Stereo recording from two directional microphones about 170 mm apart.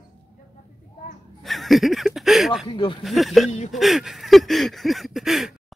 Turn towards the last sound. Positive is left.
turn(degrees=0)  # may be behind; listen again after turning